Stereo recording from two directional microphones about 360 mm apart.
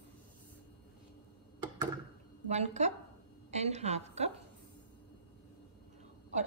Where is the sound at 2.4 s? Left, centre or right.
Centre.